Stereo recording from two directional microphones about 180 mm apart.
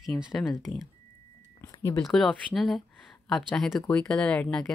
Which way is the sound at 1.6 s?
15° left (ahead or behind).